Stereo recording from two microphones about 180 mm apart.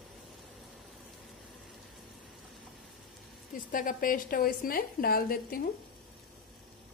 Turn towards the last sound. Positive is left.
turn(degrees=55)  # may be behind; listen again after turning